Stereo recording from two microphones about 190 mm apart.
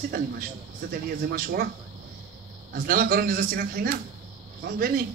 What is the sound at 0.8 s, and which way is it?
Speech, 50° right (ahead or behind).